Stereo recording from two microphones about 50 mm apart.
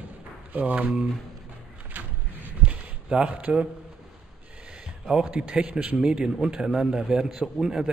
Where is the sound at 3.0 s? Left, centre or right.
Centre.